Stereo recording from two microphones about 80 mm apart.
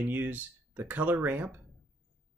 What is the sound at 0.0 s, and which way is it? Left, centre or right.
Speech, right.